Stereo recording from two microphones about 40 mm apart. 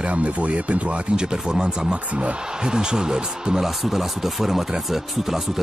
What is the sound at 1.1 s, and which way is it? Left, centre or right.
Speech, centre.